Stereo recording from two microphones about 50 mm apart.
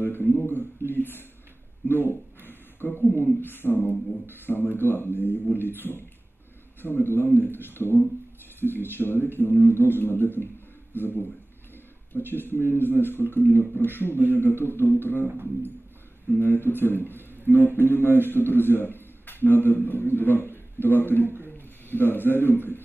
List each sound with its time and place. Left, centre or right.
0.0 s a sound: left
4.7 s speech: left
16.3 s speech: left
18.0 s a man's voice: right
18.3 s a man's voice: left